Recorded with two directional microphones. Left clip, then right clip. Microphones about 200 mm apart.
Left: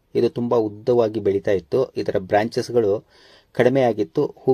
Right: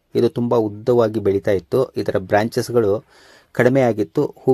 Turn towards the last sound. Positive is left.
turn(degrees=-25)  # may be behind; listen again after turning